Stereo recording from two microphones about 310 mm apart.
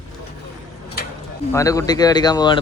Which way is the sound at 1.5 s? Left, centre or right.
Centre.